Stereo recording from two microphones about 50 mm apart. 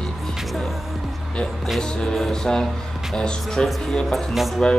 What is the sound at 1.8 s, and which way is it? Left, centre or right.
Speech, centre.